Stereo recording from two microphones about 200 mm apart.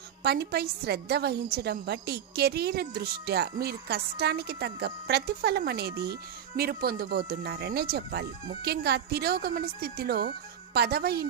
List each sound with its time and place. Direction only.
0.2 s a woman's voice: 50° right (ahead or behind)